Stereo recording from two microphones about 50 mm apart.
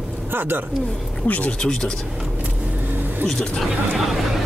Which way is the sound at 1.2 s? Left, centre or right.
Left.